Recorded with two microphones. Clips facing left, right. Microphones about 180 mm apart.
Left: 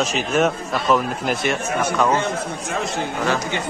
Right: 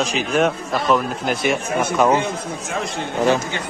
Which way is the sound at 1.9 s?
15° right (ahead or behind).